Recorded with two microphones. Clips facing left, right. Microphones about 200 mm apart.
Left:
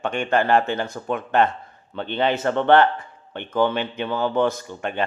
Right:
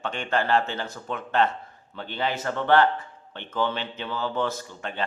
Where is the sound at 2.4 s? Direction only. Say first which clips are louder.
Left 4 dB; 60° left (ahead or behind).